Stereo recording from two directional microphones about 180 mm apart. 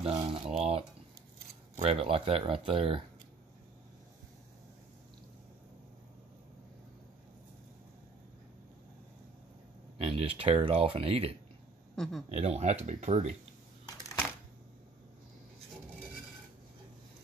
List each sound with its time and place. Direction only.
0.0 s speech: 30° right (ahead or behind)
9.9 s speech: 35° right (ahead or behind)
11.9 s speech: centre (ahead or behind)
12.3 s speech: 35° right (ahead or behind)